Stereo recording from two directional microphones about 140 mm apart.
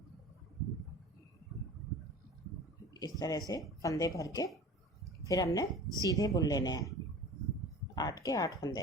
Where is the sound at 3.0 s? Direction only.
30° left (ahead or behind).